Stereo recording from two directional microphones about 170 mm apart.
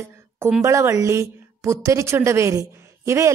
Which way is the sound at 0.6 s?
15° right (ahead or behind).